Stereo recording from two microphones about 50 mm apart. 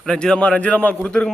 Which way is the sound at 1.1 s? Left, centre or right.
Centre.